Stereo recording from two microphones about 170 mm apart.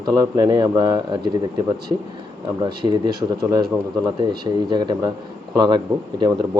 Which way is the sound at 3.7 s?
10° right (ahead or behind).